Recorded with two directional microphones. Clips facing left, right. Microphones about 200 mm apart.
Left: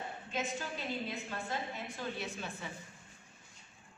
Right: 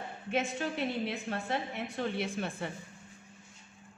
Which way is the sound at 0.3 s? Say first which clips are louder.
Right 7 dB; 65° right (ahead or behind).